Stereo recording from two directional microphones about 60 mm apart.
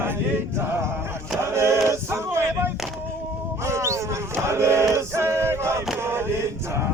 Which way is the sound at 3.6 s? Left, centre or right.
Right.